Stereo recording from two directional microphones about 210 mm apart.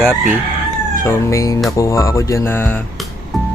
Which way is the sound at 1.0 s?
15° left (ahead or behind).